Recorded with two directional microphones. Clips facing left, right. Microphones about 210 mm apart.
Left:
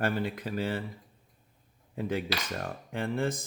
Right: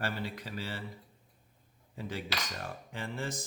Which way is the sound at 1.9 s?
55° left (ahead or behind).